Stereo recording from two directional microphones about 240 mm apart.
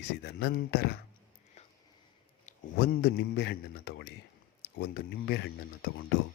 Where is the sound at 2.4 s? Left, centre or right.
Left.